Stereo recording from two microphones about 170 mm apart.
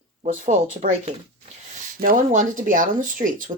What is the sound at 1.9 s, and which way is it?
A woman's voice, 55° right (ahead or behind).